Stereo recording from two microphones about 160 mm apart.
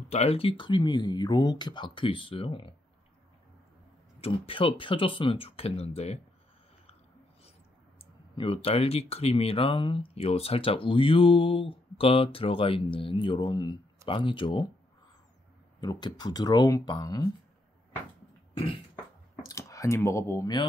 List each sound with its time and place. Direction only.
0.1 s speech: 40° left (ahead or behind)
4.2 s speech: 35° left (ahead or behind)
8.0 s speech: 35° left (ahead or behind)
15.8 s speech: 25° left (ahead or behind)
18.5 s a sound: 35° left (ahead or behind)
19.4 s speech: 20° left (ahead or behind)